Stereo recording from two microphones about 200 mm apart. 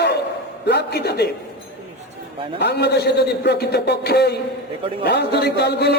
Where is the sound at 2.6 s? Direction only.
55° left (ahead or behind).